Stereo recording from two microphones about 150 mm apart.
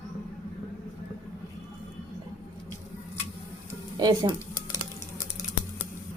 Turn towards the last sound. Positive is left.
turn(degrees=-30)  # may be behind; listen again after turning